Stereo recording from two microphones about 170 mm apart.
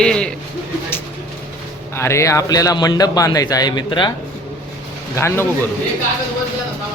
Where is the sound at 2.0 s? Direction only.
15° left (ahead or behind).